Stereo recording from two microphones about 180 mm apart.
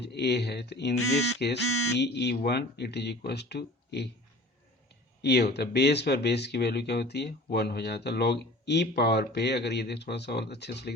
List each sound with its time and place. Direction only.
0.0 s speech: 65° left (ahead or behind)
5.2 s speech: 65° left (ahead or behind)